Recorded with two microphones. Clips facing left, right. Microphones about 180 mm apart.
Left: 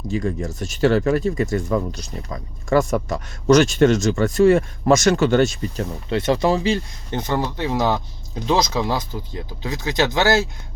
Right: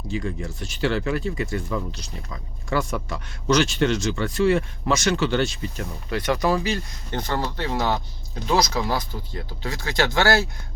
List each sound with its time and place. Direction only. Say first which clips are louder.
0.1 s speech: left 5 dB; 45° left (ahead or behind)
5.8 s speech: left 5 dB; 25° left (ahead or behind)